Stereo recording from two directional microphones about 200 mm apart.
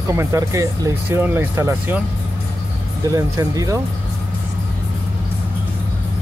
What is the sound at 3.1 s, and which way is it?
Speech, 15° right (ahead or behind).